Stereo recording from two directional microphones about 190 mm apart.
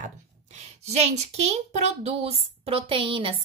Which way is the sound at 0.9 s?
35° right (ahead or behind).